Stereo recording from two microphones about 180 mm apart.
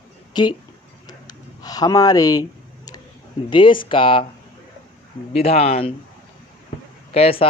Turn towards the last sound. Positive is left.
turn(degrees=35)  # may be behind; listen again after turning